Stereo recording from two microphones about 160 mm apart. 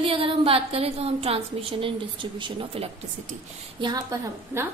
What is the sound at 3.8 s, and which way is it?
Speech, 20° right (ahead or behind).